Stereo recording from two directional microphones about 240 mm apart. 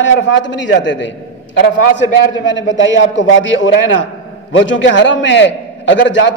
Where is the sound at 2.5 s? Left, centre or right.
Left.